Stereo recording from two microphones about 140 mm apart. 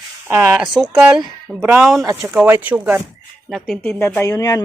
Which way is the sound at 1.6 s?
15° right (ahead or behind).